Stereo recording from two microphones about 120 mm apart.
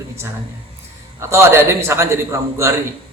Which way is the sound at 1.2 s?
20° right (ahead or behind).